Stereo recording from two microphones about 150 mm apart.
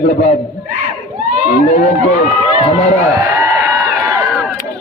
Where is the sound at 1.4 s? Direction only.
55° left (ahead or behind).